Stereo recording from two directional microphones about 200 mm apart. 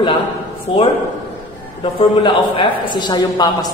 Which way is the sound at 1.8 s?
25° left (ahead or behind).